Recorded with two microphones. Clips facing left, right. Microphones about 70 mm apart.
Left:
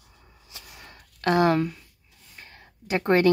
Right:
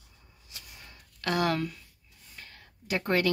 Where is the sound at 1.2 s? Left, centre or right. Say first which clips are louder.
Left 7 dB; left.